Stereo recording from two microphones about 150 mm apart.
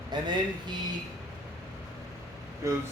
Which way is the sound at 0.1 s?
30° right (ahead or behind).